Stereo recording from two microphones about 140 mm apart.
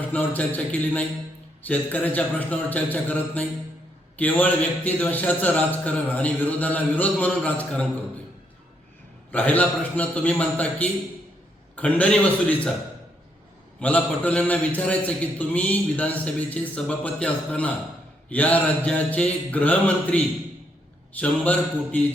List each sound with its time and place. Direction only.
0.0 s a man's voice: 10° left (ahead or behind)
9.3 s a man's voice: 10° left (ahead or behind)
13.7 s a man's voice: 10° left (ahead or behind)